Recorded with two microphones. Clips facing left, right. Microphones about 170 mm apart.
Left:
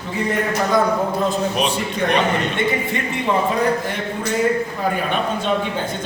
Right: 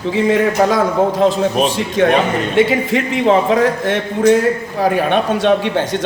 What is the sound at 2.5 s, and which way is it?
A man's voice, 90° right.